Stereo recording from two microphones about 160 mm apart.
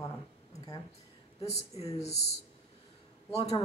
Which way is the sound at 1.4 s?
40° left (ahead or behind).